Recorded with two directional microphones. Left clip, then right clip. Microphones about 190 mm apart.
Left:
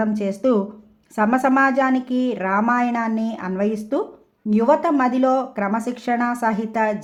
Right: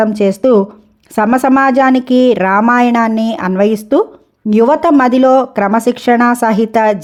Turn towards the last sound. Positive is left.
turn(degrees=-45)  # may be behind; listen again after turning